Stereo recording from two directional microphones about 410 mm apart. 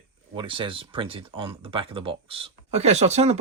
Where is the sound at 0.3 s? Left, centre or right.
Centre.